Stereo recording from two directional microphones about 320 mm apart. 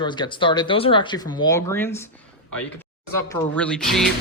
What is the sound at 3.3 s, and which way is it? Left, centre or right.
Speech, centre.